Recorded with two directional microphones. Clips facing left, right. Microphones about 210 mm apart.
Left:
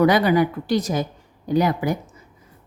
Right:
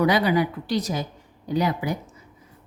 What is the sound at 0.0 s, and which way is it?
A woman's voice, 50° left (ahead or behind).